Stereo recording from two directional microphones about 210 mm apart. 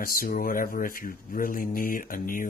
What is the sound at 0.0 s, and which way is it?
Speech, 45° left (ahead or behind).